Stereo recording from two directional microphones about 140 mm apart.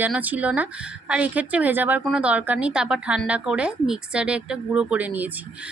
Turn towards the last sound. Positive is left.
turn(degrees=-10)  # may be behind; listen again after turning